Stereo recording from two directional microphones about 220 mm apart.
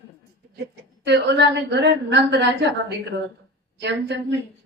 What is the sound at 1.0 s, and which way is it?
A woman's voice, 50° right (ahead or behind).